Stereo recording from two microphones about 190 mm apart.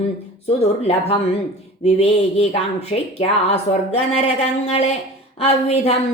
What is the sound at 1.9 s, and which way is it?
A woman's voice, 35° left (ahead or behind).